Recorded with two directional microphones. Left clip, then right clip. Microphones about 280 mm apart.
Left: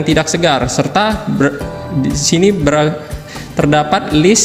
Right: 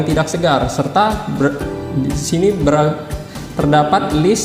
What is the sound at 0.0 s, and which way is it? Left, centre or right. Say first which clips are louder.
A man's voice: left 3 dB; left.